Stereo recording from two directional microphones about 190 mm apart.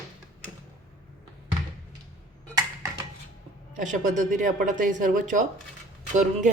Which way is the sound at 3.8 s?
40° right (ahead or behind).